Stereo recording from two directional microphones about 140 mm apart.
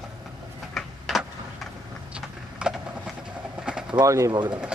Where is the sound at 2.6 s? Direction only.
5° right (ahead or behind).